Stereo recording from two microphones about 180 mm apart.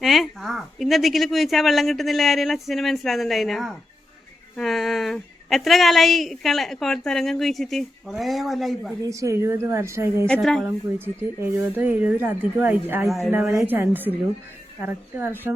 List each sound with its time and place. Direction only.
0.0 s speech: centre (ahead or behind)
9.0 s a woman's voice: 20° right (ahead or behind)
10.2 s speech: 5° left (ahead or behind)
10.6 s a woman's voice: 10° right (ahead or behind)
13.1 s speech: centre (ahead or behind)
13.3 s a woman's voice: 15° right (ahead or behind)